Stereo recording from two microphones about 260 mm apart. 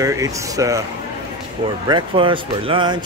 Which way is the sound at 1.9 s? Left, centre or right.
Centre.